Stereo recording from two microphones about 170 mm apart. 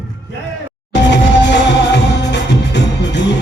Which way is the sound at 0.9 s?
90° left.